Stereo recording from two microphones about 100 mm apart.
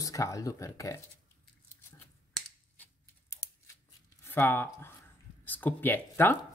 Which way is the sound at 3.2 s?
30° left (ahead or behind).